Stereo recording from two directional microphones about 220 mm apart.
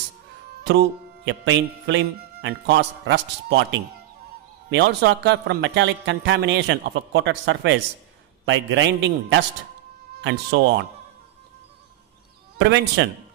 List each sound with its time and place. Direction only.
0.7 s a man's voice: 55° right (ahead or behind)
12.5 s speech: 50° right (ahead or behind)